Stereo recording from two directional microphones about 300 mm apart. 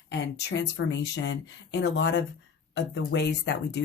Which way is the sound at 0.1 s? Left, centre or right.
Left.